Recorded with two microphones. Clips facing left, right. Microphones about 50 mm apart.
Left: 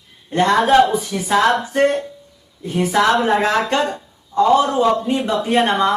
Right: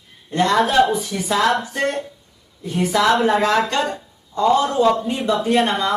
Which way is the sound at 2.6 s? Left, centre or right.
Left.